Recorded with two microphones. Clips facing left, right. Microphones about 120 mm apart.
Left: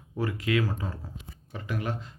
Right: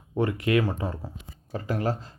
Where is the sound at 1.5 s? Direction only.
40° right (ahead or behind).